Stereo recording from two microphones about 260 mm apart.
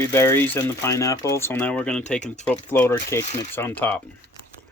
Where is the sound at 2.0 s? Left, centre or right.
Left.